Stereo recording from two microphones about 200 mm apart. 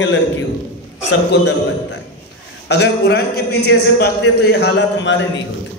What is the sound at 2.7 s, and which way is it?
A man's voice, 55° left (ahead or behind).